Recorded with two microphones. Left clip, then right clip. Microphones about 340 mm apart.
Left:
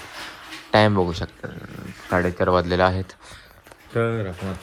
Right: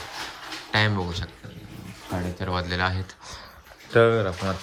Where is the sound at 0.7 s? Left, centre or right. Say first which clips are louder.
Left 7 dB; centre.